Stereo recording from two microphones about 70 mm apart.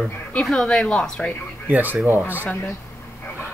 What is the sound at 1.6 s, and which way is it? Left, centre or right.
Speech, right.